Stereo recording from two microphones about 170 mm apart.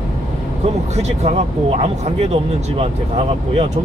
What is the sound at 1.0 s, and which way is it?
Speech, 40° right (ahead or behind).